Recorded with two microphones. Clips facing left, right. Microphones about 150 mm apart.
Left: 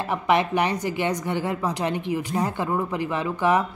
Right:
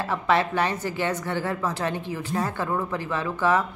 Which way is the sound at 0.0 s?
15° left (ahead or behind).